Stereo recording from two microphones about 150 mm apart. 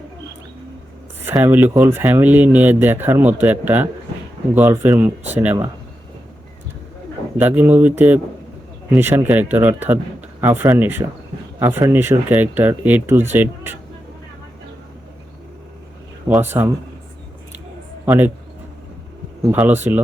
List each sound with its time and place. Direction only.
1.2 s speech: 15° right (ahead or behind)
7.3 s speech: 10° right (ahead or behind)
16.4 s speech: 15° right (ahead or behind)
18.0 s a man's voice: 10° right (ahead or behind)
19.4 s speech: 10° right (ahead or behind)